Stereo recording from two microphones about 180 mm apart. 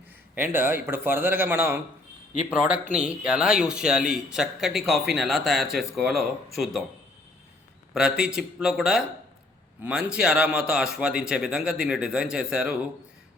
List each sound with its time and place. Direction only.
0.3 s a man's voice: 10° right (ahead or behind)
7.9 s speech: 5° right (ahead or behind)